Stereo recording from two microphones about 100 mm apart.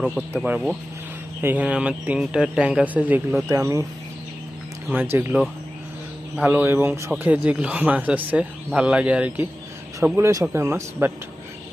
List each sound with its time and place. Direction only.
0.4 s speech: 15° right (ahead or behind)
1.6 s speech: 10° right (ahead or behind)
3.5 s speech: 35° right (ahead or behind)
4.9 s speech: 20° right (ahead or behind)
6.3 s speech: 15° right (ahead or behind)
7.2 s speech: 15° right (ahead or behind)
10.0 s speech: 30° right (ahead or behind)